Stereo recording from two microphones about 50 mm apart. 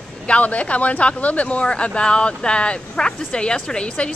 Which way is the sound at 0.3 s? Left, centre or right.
Left.